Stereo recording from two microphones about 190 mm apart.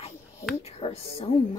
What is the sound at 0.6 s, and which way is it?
Speech, 30° left (ahead or behind).